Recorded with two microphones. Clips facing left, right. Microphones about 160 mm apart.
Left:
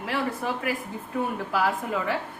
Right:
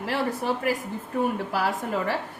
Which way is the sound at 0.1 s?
40° right (ahead or behind).